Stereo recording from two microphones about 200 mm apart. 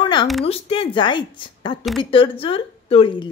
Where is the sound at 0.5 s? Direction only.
25° left (ahead or behind).